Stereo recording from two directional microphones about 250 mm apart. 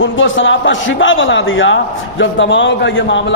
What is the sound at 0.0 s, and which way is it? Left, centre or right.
A man's voice, left.